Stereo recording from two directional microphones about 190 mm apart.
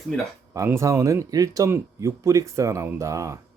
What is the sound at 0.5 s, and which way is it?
Speech, 15° right (ahead or behind).